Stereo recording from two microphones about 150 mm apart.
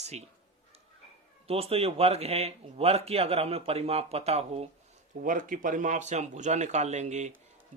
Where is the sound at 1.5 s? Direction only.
40° right (ahead or behind).